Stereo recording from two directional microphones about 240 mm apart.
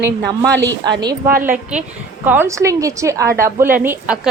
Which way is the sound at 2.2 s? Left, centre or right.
Centre.